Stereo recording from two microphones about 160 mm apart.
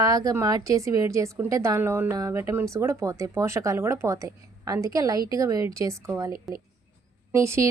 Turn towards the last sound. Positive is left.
turn(degrees=-20)  # may be behind; listen again after turning